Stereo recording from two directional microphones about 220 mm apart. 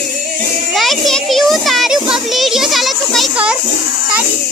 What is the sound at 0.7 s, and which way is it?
Children playing, centre (ahead or behind).